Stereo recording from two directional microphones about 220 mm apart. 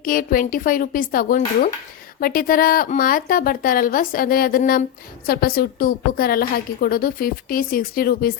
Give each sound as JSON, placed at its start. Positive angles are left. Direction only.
{"t": 0.0, "sound": "a woman's voice", "side_deg": 40}